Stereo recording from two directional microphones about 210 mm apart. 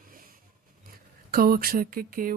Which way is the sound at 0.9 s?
45° right (ahead or behind).